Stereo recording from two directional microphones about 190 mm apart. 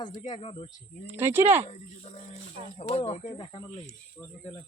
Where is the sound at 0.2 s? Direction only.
30° left (ahead or behind).